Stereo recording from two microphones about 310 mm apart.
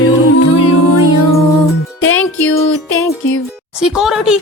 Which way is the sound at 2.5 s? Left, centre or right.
Left.